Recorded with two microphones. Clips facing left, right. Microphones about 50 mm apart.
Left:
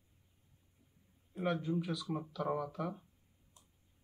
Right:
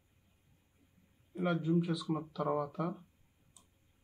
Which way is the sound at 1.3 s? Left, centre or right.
Centre.